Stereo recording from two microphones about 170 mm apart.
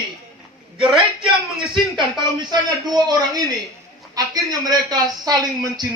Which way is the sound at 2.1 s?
25° right (ahead or behind).